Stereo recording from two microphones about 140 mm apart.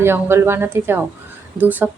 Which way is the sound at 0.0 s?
15° right (ahead or behind).